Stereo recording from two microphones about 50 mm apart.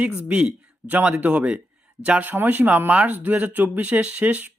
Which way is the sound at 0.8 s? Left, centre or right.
Right.